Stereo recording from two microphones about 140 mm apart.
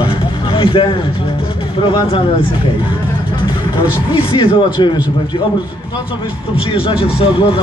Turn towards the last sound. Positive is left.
turn(degrees=40)  # may be behind; listen again after turning